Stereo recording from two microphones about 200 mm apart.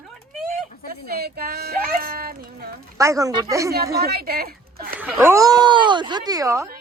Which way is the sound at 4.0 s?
50° right (ahead or behind).